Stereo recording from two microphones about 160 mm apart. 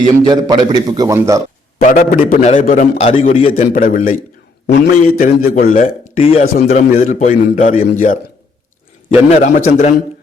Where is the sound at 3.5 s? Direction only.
55° left (ahead or behind).